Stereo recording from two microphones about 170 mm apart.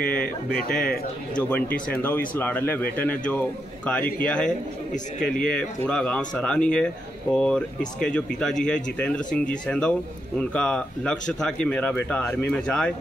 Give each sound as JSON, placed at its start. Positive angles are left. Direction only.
{"t": 0.0, "sound": "speech", "side_deg": 5}